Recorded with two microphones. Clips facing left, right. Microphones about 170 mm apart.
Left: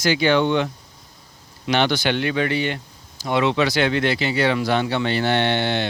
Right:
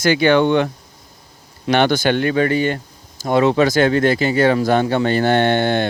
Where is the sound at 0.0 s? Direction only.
55° right (ahead or behind).